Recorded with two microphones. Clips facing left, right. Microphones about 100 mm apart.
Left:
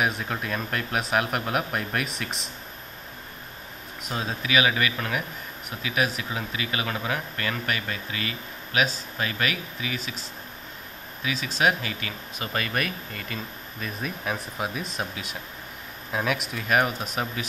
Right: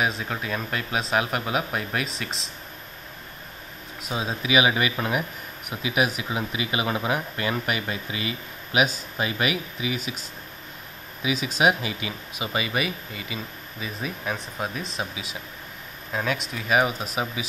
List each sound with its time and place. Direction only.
0.2 s speech: centre (ahead or behind)
4.0 s speech: 10° right (ahead or behind)
11.2 s speech: 10° right (ahead or behind)